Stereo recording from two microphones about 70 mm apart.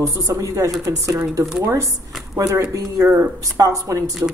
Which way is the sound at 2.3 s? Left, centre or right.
Right.